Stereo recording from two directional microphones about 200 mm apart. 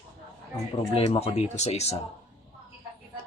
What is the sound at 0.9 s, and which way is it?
Speech, 30° left (ahead or behind).